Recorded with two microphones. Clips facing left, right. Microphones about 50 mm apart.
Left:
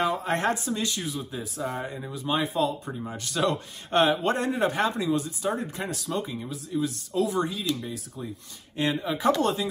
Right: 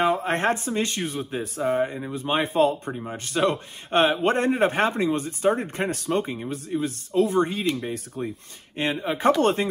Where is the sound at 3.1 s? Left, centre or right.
Right.